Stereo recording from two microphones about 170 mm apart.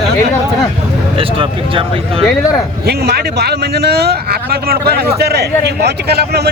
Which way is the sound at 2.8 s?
70° right (ahead or behind).